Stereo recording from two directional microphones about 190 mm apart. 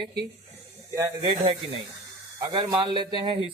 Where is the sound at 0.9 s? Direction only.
15° right (ahead or behind).